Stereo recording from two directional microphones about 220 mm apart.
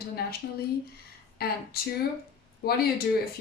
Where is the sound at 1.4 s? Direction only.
45° left (ahead or behind).